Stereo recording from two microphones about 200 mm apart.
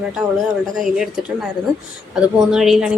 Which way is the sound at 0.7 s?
Centre (ahead or behind).